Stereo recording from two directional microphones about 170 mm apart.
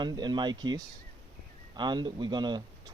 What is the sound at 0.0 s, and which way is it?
Speech, 25° right (ahead or behind).